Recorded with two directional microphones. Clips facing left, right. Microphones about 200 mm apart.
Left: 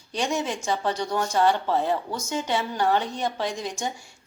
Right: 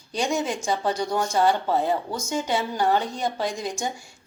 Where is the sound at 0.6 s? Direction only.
15° right (ahead or behind).